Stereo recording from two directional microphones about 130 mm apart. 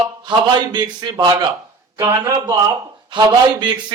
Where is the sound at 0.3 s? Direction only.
35° right (ahead or behind).